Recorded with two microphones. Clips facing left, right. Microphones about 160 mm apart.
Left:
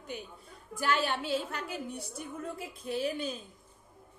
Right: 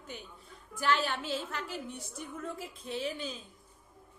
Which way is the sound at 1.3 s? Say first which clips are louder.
Left 3 dB; 50° left (ahead or behind).